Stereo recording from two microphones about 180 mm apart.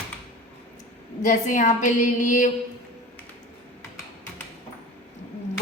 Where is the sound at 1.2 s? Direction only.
45° left (ahead or behind).